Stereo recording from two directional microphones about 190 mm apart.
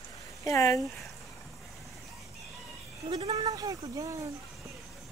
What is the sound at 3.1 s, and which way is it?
Speech, 25° right (ahead or behind).